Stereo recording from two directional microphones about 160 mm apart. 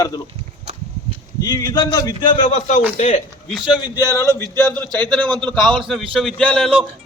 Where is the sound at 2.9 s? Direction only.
50° left (ahead or behind).